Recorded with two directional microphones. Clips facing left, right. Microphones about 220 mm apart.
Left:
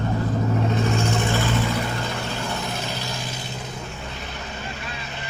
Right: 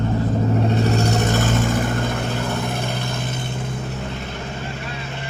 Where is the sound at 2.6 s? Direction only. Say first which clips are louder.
Right 4 dB; 55° right (ahead or behind).